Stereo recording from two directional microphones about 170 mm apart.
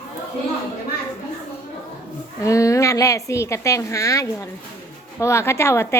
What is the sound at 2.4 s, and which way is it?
A woman's voice, 20° left (ahead or behind).